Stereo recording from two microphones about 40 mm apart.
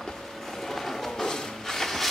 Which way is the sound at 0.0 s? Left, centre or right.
Centre.